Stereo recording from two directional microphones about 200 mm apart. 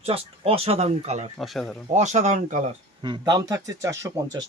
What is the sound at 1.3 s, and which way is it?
Speech, centre (ahead or behind).